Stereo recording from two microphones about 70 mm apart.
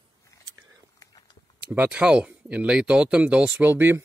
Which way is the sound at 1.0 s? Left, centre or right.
Left.